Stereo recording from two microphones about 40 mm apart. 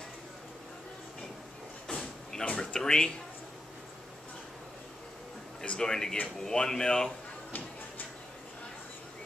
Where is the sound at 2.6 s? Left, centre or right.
Centre.